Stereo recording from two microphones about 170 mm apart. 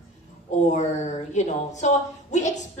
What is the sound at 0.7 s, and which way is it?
A woman's voice, 45° left (ahead or behind).